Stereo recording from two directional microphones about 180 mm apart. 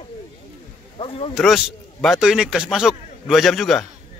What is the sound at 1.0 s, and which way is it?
Speech, 30° left (ahead or behind).